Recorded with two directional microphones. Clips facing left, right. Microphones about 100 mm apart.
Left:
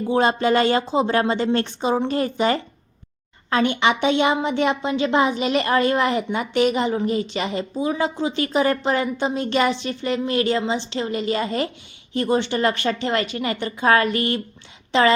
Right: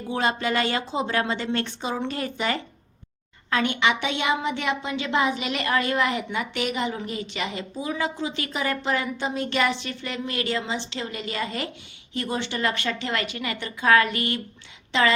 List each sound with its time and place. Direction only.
0.1 s a woman's voice: 30° left (ahead or behind)